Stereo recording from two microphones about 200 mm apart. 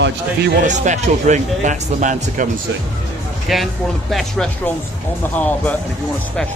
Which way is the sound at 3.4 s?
Centre (ahead or behind).